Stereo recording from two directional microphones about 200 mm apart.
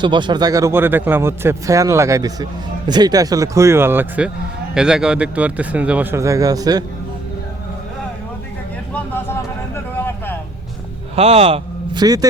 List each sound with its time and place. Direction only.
0.0 s speech: 25° right (ahead or behind)
8.9 s a sound: 10° left (ahead or behind)
11.1 s a man's voice: 30° right (ahead or behind)
12.0 s a man's voice: 20° right (ahead or behind)